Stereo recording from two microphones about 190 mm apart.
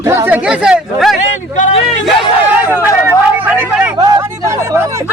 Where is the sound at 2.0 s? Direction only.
10° right (ahead or behind).